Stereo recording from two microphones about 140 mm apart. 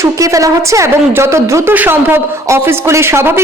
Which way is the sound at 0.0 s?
20° right (ahead or behind).